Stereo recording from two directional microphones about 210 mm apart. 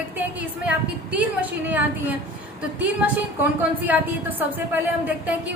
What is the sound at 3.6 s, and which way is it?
Speech, 10° right (ahead or behind).